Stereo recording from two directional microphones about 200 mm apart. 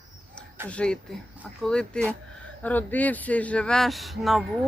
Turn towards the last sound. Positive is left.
turn(degrees=0)  # may be behind; listen again after turning